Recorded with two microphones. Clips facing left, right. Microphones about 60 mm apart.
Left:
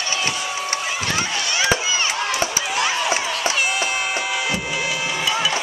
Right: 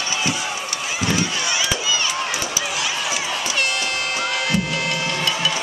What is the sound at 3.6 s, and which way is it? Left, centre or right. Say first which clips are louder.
Music: left 1 dB; centre.